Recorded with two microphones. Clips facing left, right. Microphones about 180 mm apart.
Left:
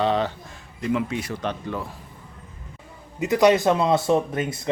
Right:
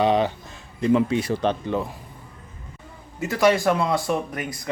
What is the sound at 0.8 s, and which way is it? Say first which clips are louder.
A man's voice: right 5 dB; 30° right (ahead or behind).